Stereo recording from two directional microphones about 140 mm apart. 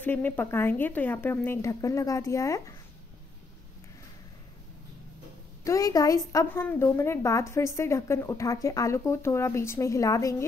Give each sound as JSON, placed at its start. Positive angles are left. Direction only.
{"t": 0.0, "sound": "speech", "side_deg": 15}
{"t": 5.6, "sound": "a woman's voice", "side_deg": 25}